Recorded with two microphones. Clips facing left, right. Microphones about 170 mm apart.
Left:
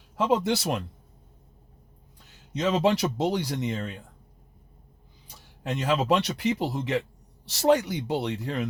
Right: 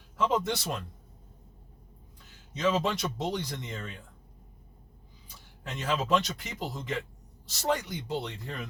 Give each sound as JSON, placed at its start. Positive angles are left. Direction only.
{"t": 0.2, "sound": "speech", "side_deg": 75}
{"t": 2.5, "sound": "speech", "side_deg": 75}
{"t": 5.7, "sound": "speech", "side_deg": 70}